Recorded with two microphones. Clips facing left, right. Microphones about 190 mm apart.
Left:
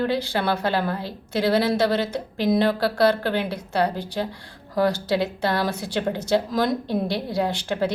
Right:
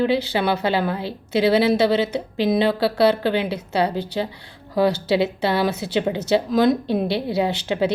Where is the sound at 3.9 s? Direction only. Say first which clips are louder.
Right 3 dB; 70° right (ahead or behind).